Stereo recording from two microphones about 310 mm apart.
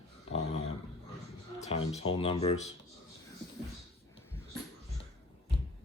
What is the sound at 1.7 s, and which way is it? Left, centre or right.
Speech, centre.